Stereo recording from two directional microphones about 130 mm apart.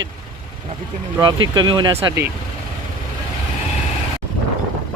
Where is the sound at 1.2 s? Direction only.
35° right (ahead or behind).